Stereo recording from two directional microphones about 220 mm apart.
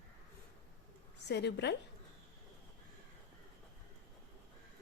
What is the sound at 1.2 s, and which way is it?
Speech, 50° left (ahead or behind).